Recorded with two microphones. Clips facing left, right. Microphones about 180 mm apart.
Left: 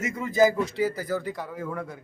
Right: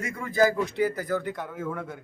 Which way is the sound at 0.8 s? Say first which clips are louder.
Even; centre (ahead or behind).